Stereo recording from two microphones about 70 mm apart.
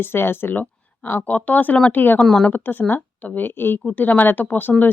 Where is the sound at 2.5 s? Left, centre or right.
Left.